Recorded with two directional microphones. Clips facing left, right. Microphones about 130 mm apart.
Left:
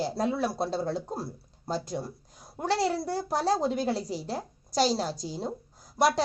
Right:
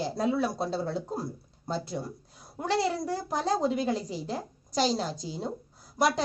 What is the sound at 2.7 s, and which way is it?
A woman's voice, 35° left (ahead or behind).